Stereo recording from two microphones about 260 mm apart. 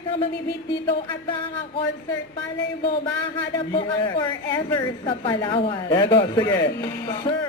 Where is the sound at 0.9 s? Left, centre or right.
Centre.